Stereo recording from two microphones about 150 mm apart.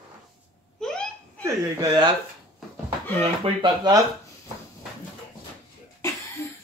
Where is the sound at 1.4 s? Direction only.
25° right (ahead or behind).